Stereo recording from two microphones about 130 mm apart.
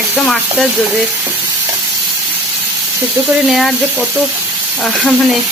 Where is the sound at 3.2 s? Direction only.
20° right (ahead or behind).